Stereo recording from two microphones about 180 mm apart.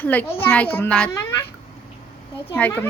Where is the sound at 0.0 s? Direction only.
10° left (ahead or behind).